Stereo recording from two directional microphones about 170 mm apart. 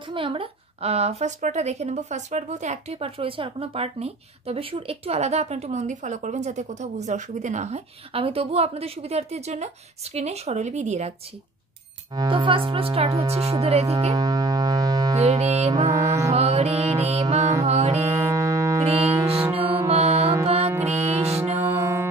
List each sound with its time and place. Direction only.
0.1 s a woman's voice: 30° right (ahead or behind)
12.2 s a woman's voice: 30° right (ahead or behind)
14.1 s music: 20° right (ahead or behind)
15.1 s a woman's voice: 40° right (ahead or behind)
15.9 s mantra: 15° right (ahead or behind)
16.3 s music: 40° right (ahead or behind)
18.1 s music: 15° right (ahead or behind)
18.9 s music: 35° right (ahead or behind)
21.5 s music: 15° right (ahead or behind)